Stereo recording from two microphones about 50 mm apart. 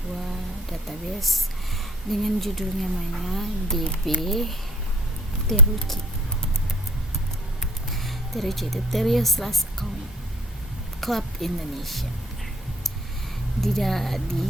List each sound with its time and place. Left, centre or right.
0.3 s a sound: centre
2.0 s a woman's voice: centre
7.6 s speech: centre
11.0 s a woman's voice: centre
13.6 s a woman's voice: centre